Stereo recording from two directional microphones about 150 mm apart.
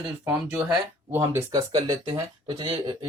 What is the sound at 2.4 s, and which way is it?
Speech, 30° right (ahead or behind).